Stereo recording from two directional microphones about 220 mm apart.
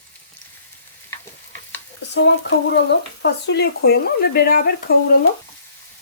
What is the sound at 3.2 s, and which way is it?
Speech, 50° left (ahead or behind).